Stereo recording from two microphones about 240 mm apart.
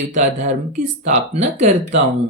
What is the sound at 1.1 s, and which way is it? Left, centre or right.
Speech, right.